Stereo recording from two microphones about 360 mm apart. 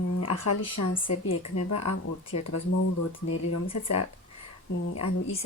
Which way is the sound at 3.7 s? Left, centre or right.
Left.